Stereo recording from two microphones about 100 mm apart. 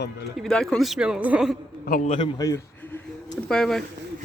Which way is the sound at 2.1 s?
60° left (ahead or behind).